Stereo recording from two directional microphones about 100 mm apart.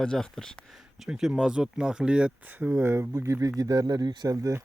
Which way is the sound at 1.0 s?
5° right (ahead or behind).